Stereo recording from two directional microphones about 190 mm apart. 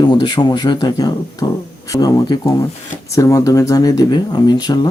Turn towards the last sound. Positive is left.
turn(degrees=20)  # may be behind; listen again after turning